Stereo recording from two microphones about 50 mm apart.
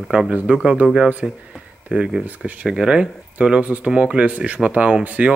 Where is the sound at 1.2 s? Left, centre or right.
Centre.